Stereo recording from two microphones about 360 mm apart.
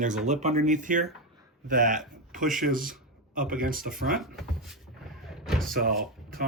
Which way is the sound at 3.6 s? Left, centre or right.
Right.